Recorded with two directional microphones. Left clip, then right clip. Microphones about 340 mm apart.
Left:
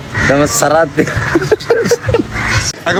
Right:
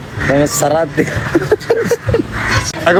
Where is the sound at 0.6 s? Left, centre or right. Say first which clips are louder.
Left 3 dB; centre.